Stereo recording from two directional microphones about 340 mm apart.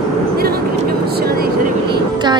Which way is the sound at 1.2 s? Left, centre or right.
Right.